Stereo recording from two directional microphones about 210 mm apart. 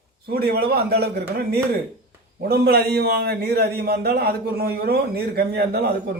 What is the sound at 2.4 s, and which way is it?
A man's voice, 50° right (ahead or behind).